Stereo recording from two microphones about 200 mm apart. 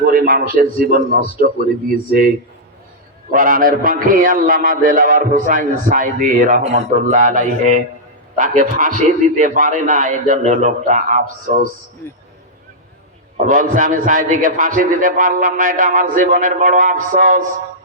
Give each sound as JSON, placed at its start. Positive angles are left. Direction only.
{"t": 0.0, "sound": "a man's voice", "side_deg": -45}
{"t": 3.3, "sound": "a man's voice", "side_deg": -45}
{"t": 13.3, "sound": "a man's voice", "side_deg": -40}